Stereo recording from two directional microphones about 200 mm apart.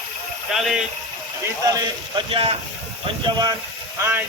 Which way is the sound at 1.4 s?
20° right (ahead or behind).